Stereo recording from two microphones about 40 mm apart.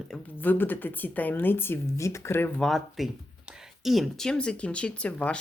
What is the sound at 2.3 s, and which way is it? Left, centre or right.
Speech, left.